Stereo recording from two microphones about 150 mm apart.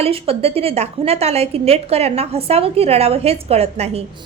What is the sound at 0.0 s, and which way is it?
A woman's voice, 40° right (ahead or behind).